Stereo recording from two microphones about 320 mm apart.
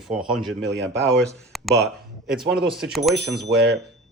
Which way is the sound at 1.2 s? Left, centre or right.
Centre.